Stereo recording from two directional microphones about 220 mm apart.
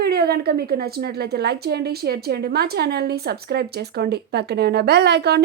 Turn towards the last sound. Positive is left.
turn(degrees=-50)  # may be behind; listen again after turning